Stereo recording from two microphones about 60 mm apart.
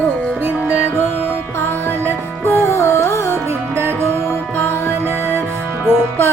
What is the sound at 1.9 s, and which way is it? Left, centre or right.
Music, right.